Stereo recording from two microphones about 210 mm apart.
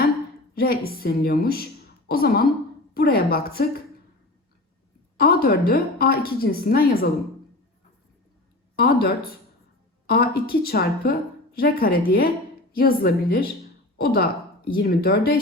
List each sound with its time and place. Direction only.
0.5 s a woman's voice: 45° left (ahead or behind)
5.1 s a woman's voice: 45° left (ahead or behind)
8.7 s a woman's voice: 45° left (ahead or behind)